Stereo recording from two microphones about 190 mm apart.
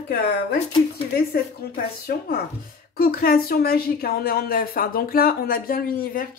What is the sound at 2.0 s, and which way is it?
Speech, 55° left (ahead or behind).